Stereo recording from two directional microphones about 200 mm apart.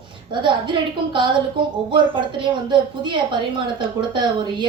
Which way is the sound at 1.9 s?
25° right (ahead or behind).